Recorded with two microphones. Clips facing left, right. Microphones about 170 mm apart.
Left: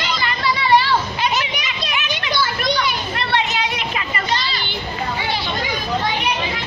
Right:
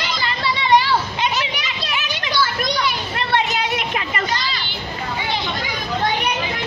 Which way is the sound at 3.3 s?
50° right (ahead or behind).